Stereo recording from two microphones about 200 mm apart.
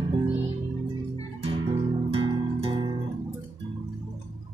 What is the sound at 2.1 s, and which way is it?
Music, 25° right (ahead or behind).